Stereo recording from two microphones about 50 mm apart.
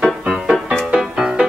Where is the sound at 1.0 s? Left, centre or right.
Centre.